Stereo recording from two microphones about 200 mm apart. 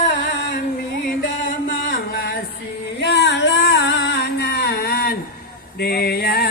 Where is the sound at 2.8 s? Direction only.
60° left (ahead or behind).